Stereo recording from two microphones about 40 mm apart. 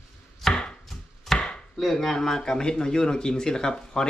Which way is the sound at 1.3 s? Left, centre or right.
Centre.